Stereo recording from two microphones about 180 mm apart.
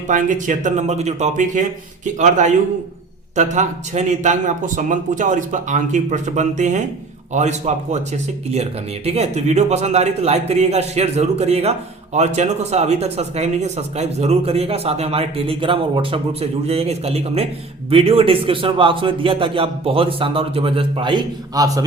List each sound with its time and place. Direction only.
0.1 s speech: 45° right (ahead or behind); by 21.8 s 20° right (ahead or behind)